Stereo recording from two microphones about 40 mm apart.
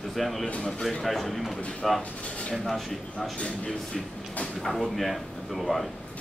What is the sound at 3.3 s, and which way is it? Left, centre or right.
Speech, left.